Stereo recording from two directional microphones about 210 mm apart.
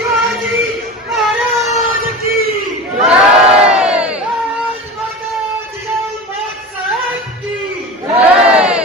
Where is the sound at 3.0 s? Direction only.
5° right (ahead or behind).